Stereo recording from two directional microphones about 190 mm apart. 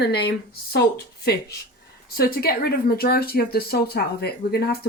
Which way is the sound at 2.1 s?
55° left (ahead or behind).